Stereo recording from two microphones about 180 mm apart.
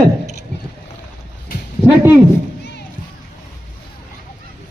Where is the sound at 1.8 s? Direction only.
15° right (ahead or behind).